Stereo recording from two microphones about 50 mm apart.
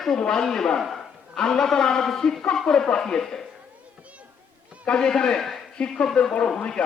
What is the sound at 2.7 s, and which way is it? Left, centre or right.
Speech, centre.